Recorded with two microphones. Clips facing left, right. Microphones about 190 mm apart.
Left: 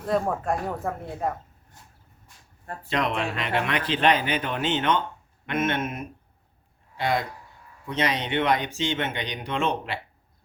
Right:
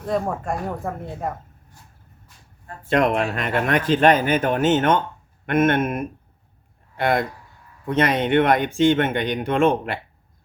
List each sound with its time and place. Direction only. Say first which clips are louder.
0.0 s speech: right 1 dB; centre (ahead or behind)
2.9 s speech: right 7 dB; 50° right (ahead or behind)